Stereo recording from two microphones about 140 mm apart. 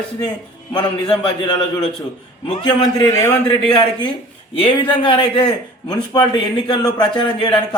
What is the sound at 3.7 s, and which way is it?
A man's voice, 35° left (ahead or behind).